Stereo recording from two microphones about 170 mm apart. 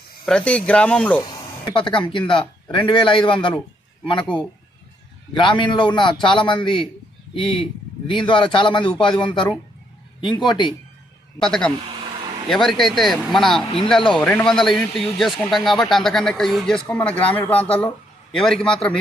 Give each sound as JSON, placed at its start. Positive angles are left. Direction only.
{"t": 0.3, "sound": "speech", "side_deg": 5}
{"t": 1.7, "sound": "a man's voice", "side_deg": 30}
{"t": 5.3, "sound": "a man's voice", "side_deg": 30}
{"t": 11.3, "sound": "a man's voice", "side_deg": 5}